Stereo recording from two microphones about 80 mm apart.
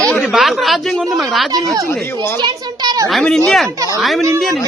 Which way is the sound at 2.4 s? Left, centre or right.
Right.